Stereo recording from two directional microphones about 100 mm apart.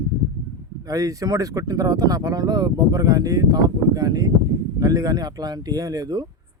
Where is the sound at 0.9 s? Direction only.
35° right (ahead or behind).